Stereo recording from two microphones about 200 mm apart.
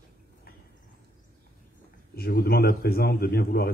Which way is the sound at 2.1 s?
50° left (ahead or behind).